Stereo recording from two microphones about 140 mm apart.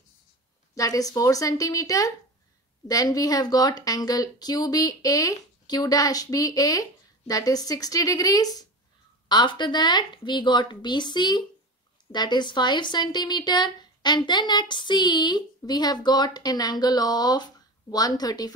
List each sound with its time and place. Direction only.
0.7 s speech: 25° left (ahead or behind)